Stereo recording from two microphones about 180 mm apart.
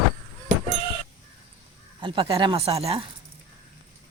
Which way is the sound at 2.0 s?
25° right (ahead or behind).